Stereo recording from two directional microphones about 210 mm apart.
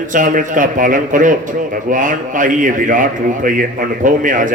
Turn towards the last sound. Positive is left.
turn(degrees=-40)  # may be behind; listen again after turning